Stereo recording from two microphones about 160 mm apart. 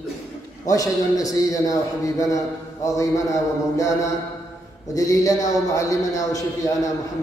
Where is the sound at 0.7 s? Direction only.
20° left (ahead or behind).